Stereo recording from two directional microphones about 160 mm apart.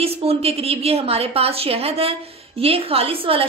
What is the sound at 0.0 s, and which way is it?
A woman's voice, 40° right (ahead or behind).